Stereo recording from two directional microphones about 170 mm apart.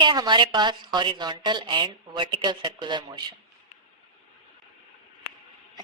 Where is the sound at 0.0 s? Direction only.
25° right (ahead or behind).